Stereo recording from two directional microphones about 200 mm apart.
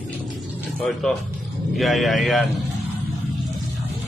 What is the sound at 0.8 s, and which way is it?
A man's voice, centre (ahead or behind).